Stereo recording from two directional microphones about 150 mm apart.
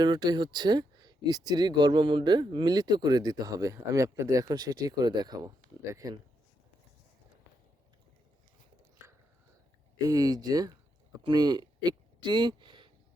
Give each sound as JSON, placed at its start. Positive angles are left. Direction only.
{"t": 0.0, "sound": "speech", "side_deg": -30}
{"t": 10.1, "sound": "speech", "side_deg": -25}